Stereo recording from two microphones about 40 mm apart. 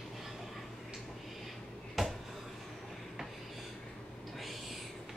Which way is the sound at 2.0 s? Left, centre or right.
Centre.